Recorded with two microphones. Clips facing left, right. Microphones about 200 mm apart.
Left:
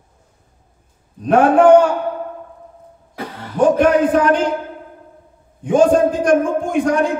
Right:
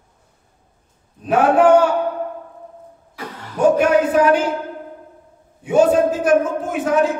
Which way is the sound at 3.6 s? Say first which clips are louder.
Left 1 dB; 10° right (ahead or behind).